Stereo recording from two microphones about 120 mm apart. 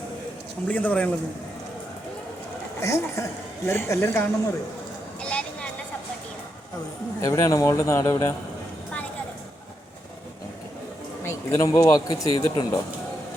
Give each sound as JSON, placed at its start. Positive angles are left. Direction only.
{"t": 0.7, "sound": "speech", "side_deg": 10}
{"t": 2.8, "sound": "a man's voice", "side_deg": 25}
{"t": 5.2, "sound": "vehicle", "side_deg": 10}
{"t": 7.2, "sound": "a man's voice", "side_deg": 25}
{"t": 11.2, "sound": "a man's voice", "side_deg": 25}